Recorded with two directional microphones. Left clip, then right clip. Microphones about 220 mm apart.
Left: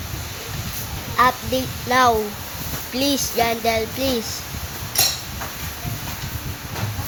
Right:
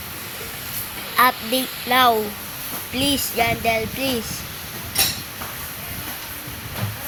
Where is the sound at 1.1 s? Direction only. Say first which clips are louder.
Even; centre (ahead or behind).